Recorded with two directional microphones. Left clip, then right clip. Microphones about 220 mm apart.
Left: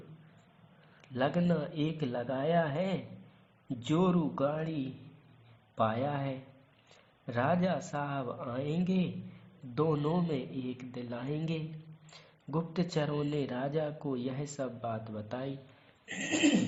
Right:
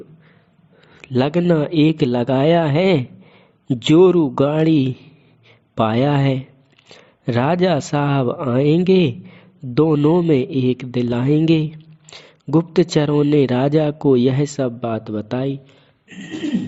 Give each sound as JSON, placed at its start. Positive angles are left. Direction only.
{"t": 0.9, "sound": "a man's voice", "side_deg": -45}
{"t": 5.7, "sound": "a man's voice", "side_deg": -50}